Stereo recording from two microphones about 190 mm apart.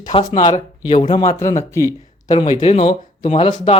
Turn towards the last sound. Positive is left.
turn(degrees=30)  # may be behind; listen again after turning